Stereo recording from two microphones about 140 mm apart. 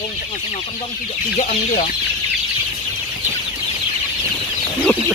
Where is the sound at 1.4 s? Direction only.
55° left (ahead or behind).